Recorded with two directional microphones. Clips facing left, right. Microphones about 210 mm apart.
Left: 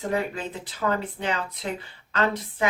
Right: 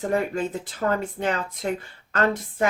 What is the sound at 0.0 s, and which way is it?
Speech, 45° right (ahead or behind).